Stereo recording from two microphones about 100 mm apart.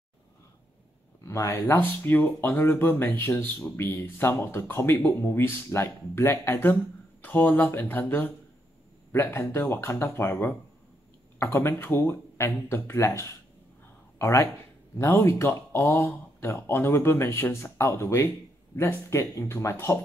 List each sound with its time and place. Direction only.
1.2 s speech: 30° left (ahead or behind)
1.7 s speech: 20° left (ahead or behind)